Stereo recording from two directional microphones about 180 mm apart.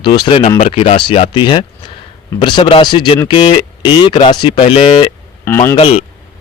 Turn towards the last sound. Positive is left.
turn(degrees=30)  # may be behind; listen again after turning